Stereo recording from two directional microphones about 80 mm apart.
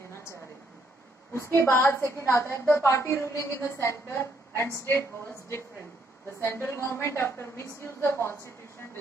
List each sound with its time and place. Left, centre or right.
0.1 s a sound: left
1.3 s a woman's voice: left
6.4 s a woman's voice: left